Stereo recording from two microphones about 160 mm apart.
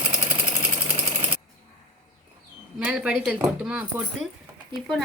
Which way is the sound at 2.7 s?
5° right (ahead or behind).